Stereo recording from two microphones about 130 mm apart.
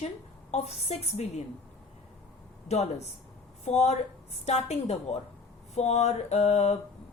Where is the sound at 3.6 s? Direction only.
55° left (ahead or behind).